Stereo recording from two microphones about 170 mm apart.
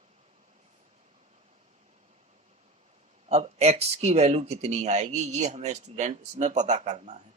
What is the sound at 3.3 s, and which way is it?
Speech, 40° right (ahead or behind).